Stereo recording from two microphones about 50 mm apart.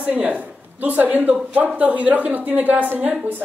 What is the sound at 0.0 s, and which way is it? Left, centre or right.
Speech, right.